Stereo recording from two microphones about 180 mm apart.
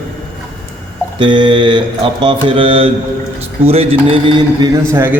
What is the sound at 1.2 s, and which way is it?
A man's voice, 25° right (ahead or behind).